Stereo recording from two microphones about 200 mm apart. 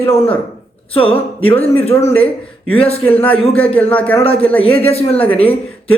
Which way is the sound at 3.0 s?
10° left (ahead or behind).